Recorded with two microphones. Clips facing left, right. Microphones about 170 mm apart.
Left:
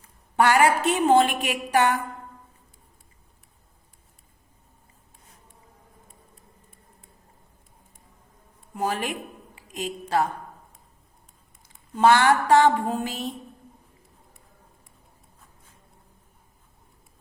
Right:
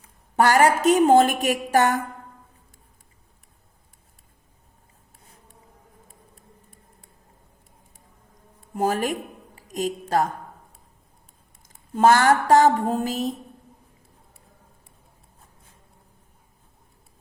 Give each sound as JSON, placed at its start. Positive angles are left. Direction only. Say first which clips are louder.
{"t": 0.3, "sound": "a woman's voice", "louder": "right 2 dB", "side_deg": -40}
{"t": 8.7, "sound": "a woman's voice", "louder": "right 4 dB", "side_deg": -45}
{"t": 11.7, "sound": "a woman's voice", "louder": "right 1 dB", "side_deg": -45}